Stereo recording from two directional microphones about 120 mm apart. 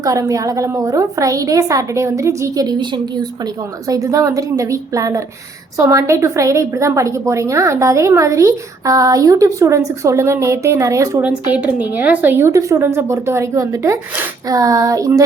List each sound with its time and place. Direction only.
0.0 s a woman's voice: 25° right (ahead or behind)
11.2 s speech: 10° right (ahead or behind)
12.5 s a woman's voice: 25° right (ahead or behind)